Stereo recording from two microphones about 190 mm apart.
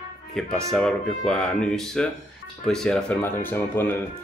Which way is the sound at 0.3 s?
Centre (ahead or behind).